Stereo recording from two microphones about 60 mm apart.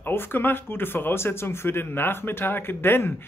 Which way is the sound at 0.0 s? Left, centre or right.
Left.